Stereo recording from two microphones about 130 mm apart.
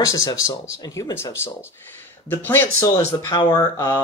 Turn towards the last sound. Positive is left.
turn(degrees=30)  # may be behind; listen again after turning